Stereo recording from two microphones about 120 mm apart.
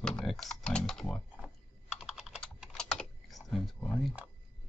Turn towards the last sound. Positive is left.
turn(degrees=5)  # may be behind; listen again after turning